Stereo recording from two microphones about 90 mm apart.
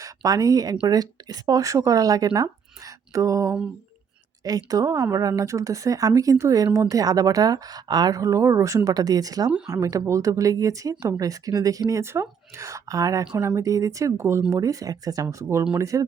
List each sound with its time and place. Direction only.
0.0 s a woman's voice: 45° right (ahead or behind)